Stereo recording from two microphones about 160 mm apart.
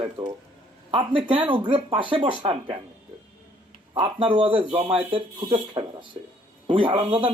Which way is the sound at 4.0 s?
35° right (ahead or behind).